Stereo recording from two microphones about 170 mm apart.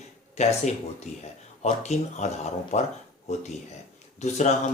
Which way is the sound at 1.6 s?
40° left (ahead or behind).